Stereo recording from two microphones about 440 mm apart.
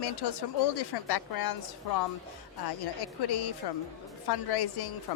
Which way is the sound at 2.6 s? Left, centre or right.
Left.